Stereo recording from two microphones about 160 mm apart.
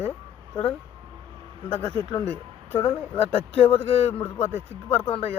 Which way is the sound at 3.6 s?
40° left (ahead or behind).